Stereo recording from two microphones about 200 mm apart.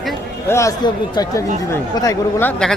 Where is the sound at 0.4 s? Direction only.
15° left (ahead or behind).